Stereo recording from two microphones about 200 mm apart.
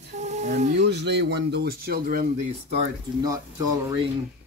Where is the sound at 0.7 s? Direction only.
60° right (ahead or behind).